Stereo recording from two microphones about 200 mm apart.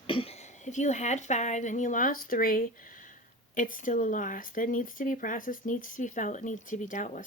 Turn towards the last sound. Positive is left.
turn(degrees=40)  # may be behind; listen again after turning